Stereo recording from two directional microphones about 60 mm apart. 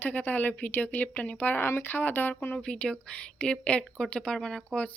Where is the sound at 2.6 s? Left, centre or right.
Centre.